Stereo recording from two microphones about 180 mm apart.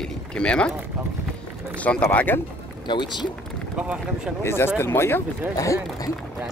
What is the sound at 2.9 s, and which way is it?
Speech, 25° left (ahead or behind).